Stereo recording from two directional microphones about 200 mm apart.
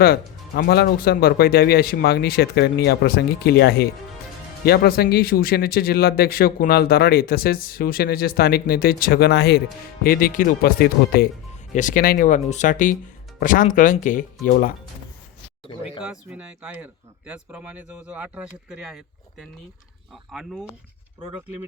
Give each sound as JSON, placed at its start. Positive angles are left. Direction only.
{"t": 0.0, "sound": "speech", "side_deg": 50}
{"t": 16.0, "sound": "speech", "side_deg": -5}